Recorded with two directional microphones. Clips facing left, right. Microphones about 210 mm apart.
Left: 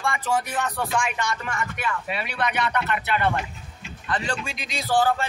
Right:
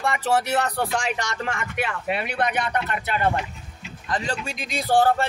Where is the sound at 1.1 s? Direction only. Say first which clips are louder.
Left 2 dB; 80° right.